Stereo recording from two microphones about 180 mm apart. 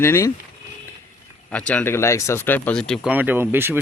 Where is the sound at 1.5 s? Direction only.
5° left (ahead or behind).